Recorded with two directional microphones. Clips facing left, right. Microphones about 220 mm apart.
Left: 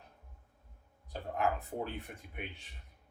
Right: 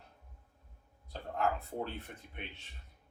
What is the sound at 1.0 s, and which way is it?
Speech, 15° left (ahead or behind).